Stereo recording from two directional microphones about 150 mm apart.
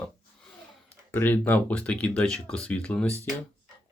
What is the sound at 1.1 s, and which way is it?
Speech, 10° left (ahead or behind).